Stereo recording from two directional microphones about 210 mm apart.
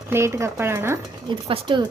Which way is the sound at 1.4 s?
25° right (ahead or behind).